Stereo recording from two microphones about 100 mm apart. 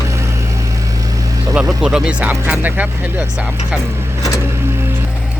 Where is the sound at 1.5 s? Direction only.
10° right (ahead or behind).